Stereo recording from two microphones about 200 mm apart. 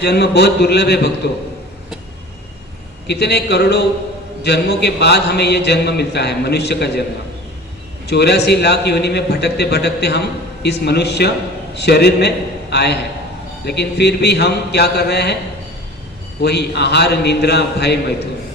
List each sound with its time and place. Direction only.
0.0 s a man's voice: 55° left (ahead or behind)
3.1 s a man's voice: 55° left (ahead or behind)
8.0 s a man's voice: 55° left (ahead or behind)
16.4 s a man's voice: 55° left (ahead or behind)